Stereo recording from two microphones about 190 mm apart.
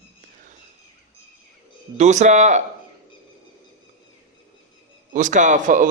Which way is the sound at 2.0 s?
40° right (ahead or behind).